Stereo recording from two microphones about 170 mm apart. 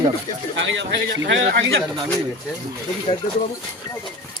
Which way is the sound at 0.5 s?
90° right.